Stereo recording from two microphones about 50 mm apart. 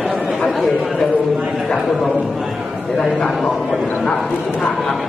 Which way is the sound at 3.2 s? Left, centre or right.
Centre.